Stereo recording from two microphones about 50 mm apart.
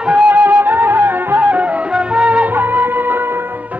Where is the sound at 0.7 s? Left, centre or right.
Right.